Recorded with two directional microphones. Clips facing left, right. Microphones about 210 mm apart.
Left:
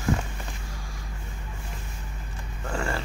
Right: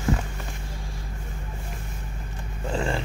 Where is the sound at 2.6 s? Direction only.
20° right (ahead or behind).